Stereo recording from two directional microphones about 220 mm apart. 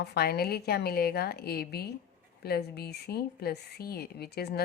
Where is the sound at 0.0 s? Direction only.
45° left (ahead or behind).